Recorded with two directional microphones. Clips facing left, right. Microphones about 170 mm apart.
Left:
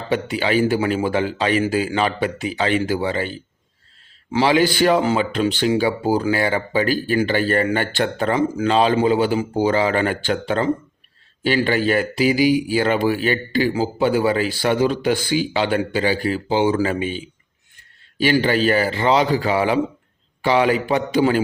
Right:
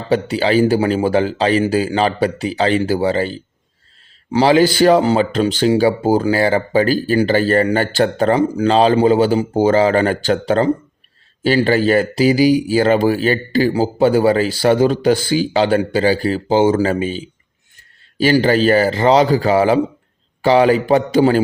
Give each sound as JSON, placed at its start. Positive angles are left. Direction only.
{"t": 0.1, "sound": "speech", "side_deg": -35}